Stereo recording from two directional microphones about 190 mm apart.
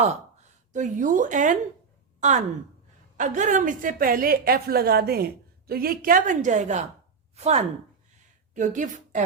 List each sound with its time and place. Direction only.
0.0 s a woman's voice: 35° right (ahead or behind)